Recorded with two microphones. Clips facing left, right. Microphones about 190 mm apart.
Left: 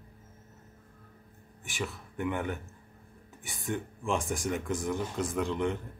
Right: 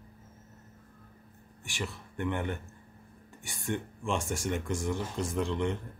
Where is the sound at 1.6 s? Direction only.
Centre (ahead or behind).